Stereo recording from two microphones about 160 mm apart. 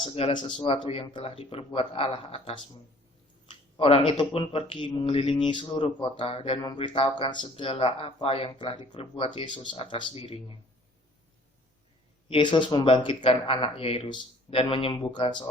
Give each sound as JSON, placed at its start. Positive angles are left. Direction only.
{"t": 0.0, "sound": "speech", "side_deg": 35}
{"t": 12.3, "sound": "speech", "side_deg": 30}